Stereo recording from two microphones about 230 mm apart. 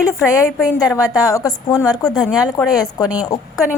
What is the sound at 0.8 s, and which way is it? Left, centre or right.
A woman's voice, centre.